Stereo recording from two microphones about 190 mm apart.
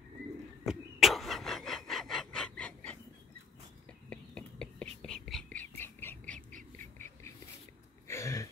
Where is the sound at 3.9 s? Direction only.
5° left (ahead or behind).